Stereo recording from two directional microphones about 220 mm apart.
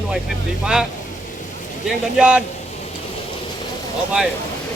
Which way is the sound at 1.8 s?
5° right (ahead or behind).